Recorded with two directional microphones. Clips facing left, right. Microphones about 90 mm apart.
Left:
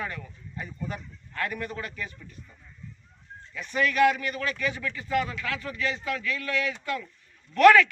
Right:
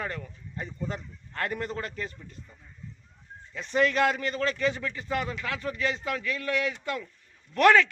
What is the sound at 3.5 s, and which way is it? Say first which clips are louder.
A man's voice: right 2 dB; 35° right (ahead or behind).